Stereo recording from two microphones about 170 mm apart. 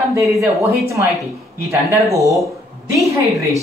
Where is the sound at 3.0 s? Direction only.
20° right (ahead or behind).